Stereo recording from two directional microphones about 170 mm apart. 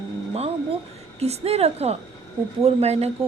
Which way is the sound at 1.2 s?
35° right (ahead or behind).